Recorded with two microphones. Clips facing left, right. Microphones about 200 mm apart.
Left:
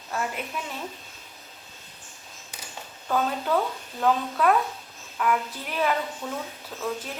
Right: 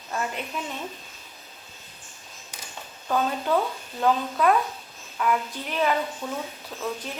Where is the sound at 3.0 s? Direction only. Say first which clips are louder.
Right 1 dB; 5° right (ahead or behind).